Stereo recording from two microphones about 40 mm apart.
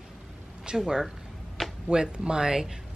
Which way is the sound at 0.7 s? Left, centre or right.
Centre.